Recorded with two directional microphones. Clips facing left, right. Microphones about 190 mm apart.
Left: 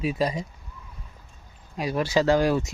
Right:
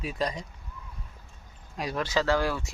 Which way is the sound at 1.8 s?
5° left (ahead or behind).